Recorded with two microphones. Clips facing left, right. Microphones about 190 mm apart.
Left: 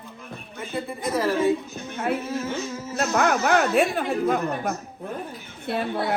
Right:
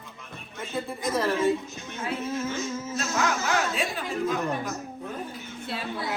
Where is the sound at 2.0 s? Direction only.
60° left (ahead or behind).